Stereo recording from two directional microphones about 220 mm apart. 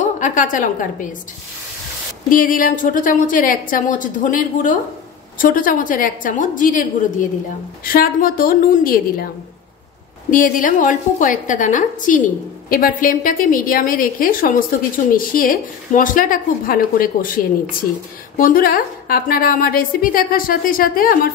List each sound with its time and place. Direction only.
0.0 s a woman's voice: 35° left (ahead or behind)
2.2 s a woman's voice: 40° left (ahead or behind)
10.3 s a woman's voice: 35° left (ahead or behind)